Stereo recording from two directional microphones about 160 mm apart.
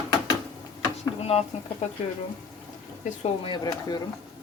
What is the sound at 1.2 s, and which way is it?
Frying, 40° left (ahead or behind).